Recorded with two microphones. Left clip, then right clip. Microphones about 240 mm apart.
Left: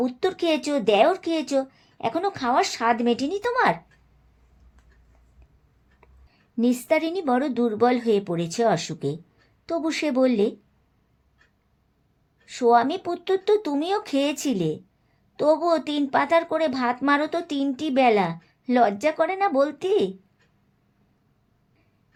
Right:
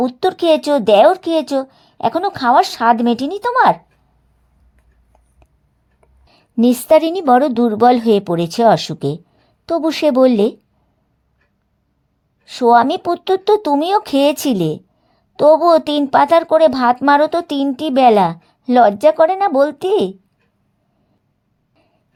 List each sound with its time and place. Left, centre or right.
0.0 s speech: right
6.2 s speech: right
12.5 s speech: right